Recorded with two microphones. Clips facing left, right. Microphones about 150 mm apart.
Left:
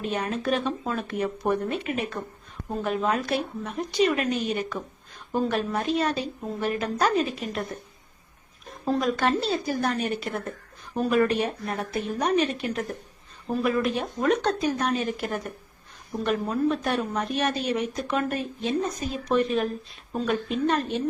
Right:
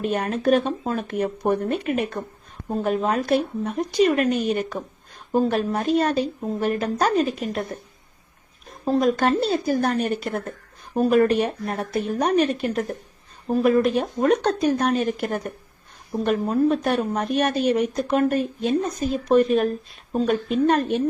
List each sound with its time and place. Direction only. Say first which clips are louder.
0.0 s speech: right 5 dB; 50° right (ahead or behind)
8.9 s speech: right 4 dB; 45° right (ahead or behind)